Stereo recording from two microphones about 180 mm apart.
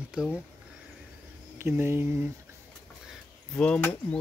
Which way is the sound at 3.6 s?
5° left (ahead or behind).